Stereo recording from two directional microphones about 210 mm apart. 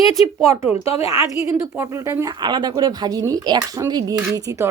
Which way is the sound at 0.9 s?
30° left (ahead or behind).